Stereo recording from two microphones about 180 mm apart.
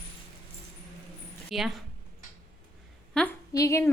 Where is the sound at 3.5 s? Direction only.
15° left (ahead or behind).